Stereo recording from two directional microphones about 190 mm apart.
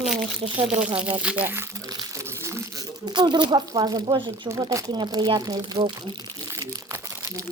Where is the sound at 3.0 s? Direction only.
25° right (ahead or behind).